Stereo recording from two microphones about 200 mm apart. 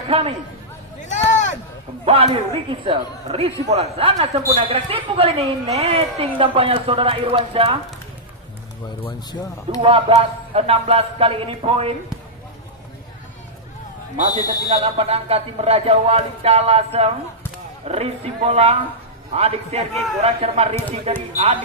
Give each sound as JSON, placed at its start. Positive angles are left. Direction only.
{"t": 0.1, "sound": "a woman's voice", "side_deg": -30}
{"t": 2.0, "sound": "a woman's voice", "side_deg": -30}
{"t": 9.0, "sound": "speech", "side_deg": 20}
{"t": 9.8, "sound": "a woman's voice", "side_deg": -30}
{"t": 14.2, "sound": "speech", "side_deg": -40}